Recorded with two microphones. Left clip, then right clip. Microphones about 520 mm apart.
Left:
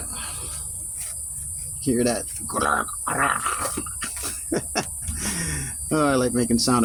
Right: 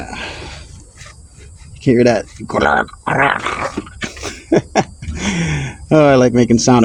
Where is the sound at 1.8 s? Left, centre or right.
Centre.